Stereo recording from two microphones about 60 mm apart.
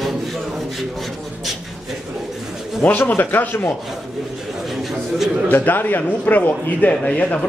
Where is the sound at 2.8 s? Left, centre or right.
Left.